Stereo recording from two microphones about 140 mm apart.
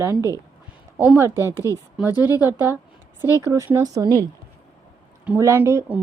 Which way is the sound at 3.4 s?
20° right (ahead or behind).